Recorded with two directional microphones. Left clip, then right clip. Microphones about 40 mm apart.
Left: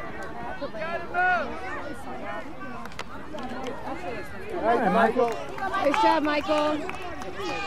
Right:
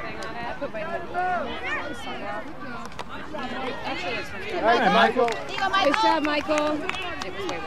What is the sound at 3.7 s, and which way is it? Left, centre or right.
Speech, left.